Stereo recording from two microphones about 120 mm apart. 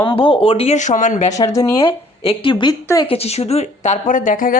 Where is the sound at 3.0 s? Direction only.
55° left (ahead or behind); by 4.3 s 90° left.